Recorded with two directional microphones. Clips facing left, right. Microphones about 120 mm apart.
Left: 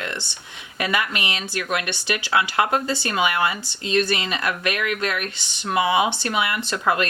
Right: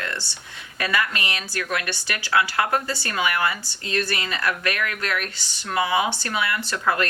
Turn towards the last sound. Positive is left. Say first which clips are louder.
# left 2 dB
turn(degrees=20)  # may be behind; listen again after turning